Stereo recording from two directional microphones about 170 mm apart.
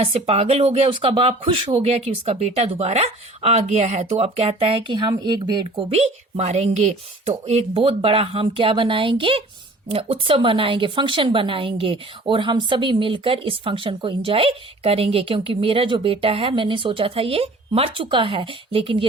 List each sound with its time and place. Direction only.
0.0 s speech: 35° right (ahead or behind)